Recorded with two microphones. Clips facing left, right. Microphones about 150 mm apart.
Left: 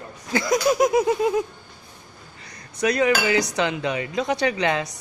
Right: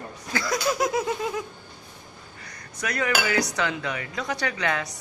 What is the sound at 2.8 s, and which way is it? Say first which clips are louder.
Dishes: left 6 dB; 20° left (ahead or behind).